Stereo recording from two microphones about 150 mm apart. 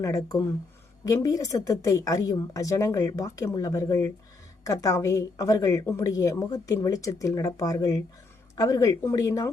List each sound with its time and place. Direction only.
0.0 s a woman's voice: 20° left (ahead or behind)